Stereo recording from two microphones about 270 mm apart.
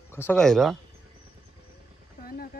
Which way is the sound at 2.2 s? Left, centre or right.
Left.